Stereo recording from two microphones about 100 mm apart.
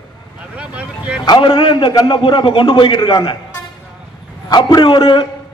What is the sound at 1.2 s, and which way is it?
A man's voice, 55° left (ahead or behind).